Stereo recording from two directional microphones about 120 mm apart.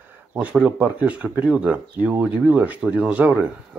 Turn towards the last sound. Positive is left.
turn(degrees=-10)  # may be behind; listen again after turning